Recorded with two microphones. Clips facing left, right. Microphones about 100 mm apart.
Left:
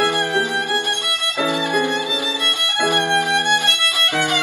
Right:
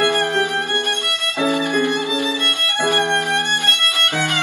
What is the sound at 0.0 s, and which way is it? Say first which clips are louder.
Music: right 1 dB; 15° left (ahead or behind).